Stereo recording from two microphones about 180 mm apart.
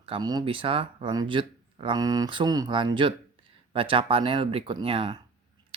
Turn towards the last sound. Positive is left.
turn(degrees=-30)  # may be behind; listen again after turning